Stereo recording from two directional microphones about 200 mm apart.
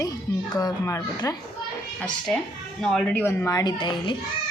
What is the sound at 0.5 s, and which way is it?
Speech, 15° left (ahead or behind).